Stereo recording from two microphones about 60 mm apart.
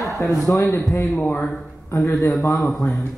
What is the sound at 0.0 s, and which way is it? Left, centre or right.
Speech, left.